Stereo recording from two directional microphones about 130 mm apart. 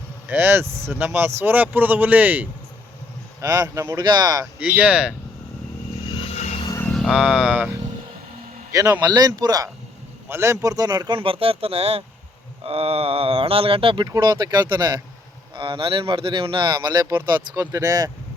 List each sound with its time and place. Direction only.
0.3 s speech: 15° right (ahead or behind)
3.4 s speech: 25° right (ahead or behind)
4.6 s speech: 10° right (ahead or behind)
6.1 s vehicle: 45° left (ahead or behind)
6.8 s speech: centre (ahead or behind)
8.7 s speech: 25° right (ahead or behind)
10.2 s speech: 20° right (ahead or behind); by 14.1 s 40° right (ahead or behind)
14.1 s speech: 30° right (ahead or behind)
15.5 s speech: 40° right (ahead or behind)